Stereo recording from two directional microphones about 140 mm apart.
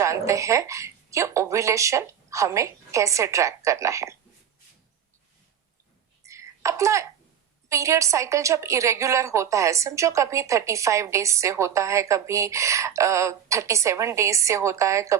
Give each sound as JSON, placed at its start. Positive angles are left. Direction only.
{"t": 0.0, "sound": "a woman's voice", "side_deg": -20}
{"t": 6.2, "sound": "a sound", "side_deg": -20}
{"t": 7.7, "sound": "a woman's voice", "side_deg": -20}